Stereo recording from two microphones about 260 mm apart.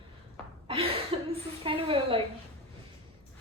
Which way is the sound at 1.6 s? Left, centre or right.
Right.